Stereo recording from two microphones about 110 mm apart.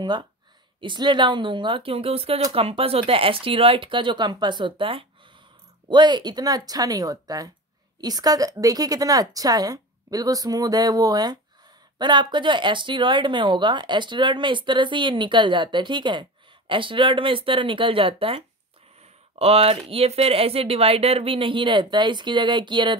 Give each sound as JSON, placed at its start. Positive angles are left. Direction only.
{"t": 0.7, "sound": "a woman's voice", "side_deg": -45}